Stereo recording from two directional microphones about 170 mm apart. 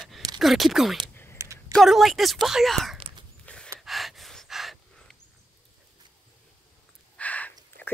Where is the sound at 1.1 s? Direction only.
15° left (ahead or behind).